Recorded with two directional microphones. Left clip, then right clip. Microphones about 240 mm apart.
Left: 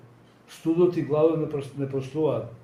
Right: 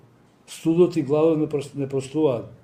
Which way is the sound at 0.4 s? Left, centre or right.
Right.